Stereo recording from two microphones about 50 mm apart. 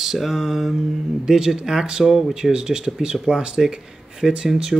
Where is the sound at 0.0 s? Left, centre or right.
Centre.